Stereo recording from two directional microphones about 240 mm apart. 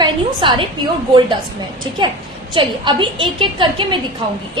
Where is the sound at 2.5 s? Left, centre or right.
Right.